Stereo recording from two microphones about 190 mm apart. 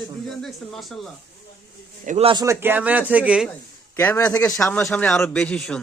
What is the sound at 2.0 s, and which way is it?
Speech, 35° right (ahead or behind).